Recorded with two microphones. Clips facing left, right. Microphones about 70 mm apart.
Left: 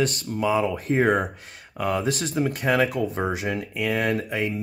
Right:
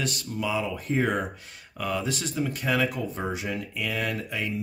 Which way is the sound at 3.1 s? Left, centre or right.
Left.